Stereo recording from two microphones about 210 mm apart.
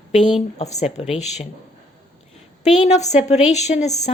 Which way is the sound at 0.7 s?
30° left (ahead or behind).